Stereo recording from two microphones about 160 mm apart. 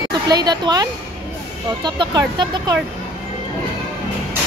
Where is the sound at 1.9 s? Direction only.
25° right (ahead or behind).